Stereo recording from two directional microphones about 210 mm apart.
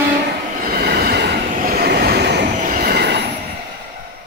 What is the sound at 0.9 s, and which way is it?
Train, 45° right (ahead or behind).